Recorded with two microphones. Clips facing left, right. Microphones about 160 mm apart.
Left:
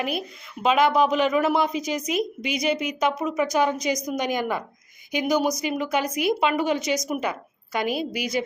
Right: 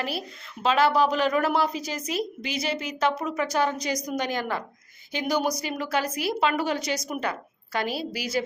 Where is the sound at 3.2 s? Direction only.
10° left (ahead or behind).